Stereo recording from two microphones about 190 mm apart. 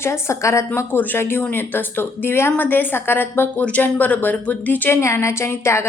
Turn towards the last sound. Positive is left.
turn(degrees=15)  # may be behind; listen again after turning